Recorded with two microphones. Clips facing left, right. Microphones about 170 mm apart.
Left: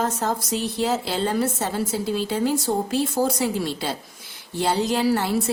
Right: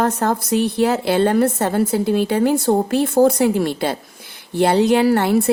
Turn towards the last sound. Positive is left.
turn(degrees=-60)  # may be behind; listen again after turning